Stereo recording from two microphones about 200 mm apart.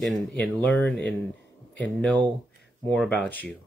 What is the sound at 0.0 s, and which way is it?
Speech, 5° left (ahead or behind).